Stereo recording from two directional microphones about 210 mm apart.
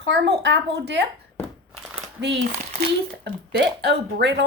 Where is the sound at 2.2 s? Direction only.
55° right (ahead or behind).